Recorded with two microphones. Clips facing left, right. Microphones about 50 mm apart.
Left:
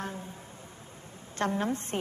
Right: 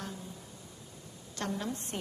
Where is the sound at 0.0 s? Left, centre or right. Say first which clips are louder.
Left 4 dB; left.